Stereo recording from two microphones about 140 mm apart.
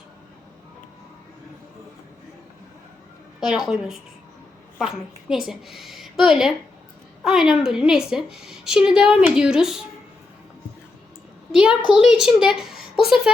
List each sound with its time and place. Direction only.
3.4 s a woman's voice: 5° right (ahead or behind)
11.5 s a woman's voice: 5° right (ahead or behind)